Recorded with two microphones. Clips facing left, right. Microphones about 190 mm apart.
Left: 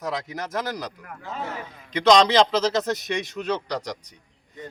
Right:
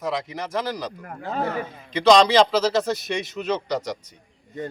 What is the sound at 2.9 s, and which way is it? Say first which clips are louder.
Speech: even; 15° left (ahead or behind).